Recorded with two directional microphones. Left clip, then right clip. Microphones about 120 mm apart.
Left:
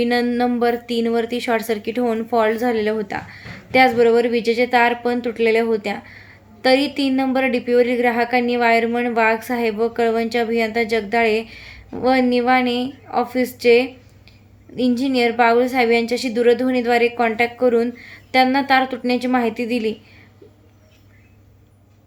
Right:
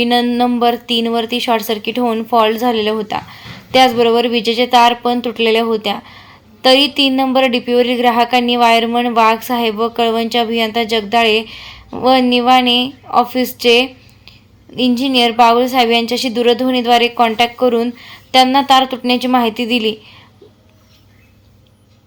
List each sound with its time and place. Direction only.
0.0 s speech: 15° right (ahead or behind)